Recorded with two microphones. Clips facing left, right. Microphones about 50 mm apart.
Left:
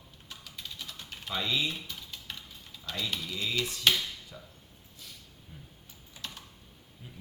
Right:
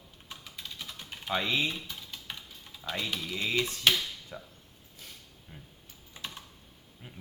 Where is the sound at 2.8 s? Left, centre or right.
Right.